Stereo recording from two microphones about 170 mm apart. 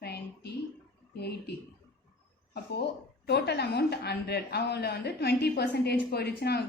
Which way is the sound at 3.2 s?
80° left.